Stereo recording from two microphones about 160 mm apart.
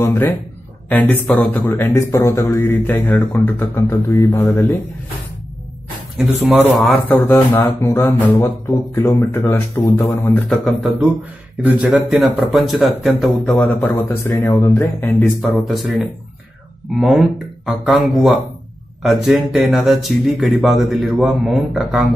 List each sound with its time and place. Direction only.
0.0 s a man's voice: 15° left (ahead or behind)
6.1 s speech: 5° right (ahead or behind)
6.8 s a man's voice: 10° left (ahead or behind)
7.2 s a man's voice: 20° left (ahead or behind)
10.5 s a man's voice: centre (ahead or behind)
15.6 s speech: centre (ahead or behind)
17.0 s speech: centre (ahead or behind)